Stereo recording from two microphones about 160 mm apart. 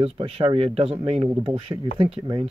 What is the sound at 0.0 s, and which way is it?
Speech, 35° right (ahead or behind).